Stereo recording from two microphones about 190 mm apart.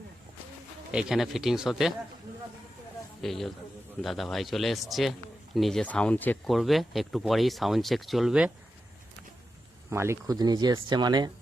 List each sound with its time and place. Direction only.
0.9 s speech: 5° right (ahead or behind)
3.2 s a man's voice: centre (ahead or behind)
9.9 s speech: 15° right (ahead or behind)